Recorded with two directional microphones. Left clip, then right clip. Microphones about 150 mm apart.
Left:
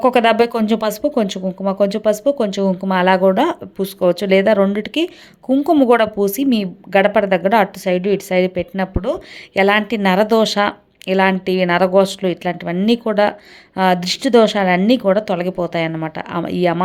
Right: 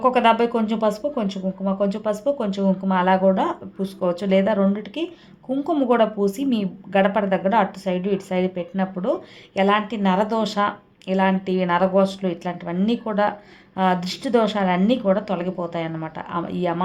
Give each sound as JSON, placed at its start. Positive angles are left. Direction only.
{"t": 0.0, "sound": "a woman's voice", "side_deg": 40}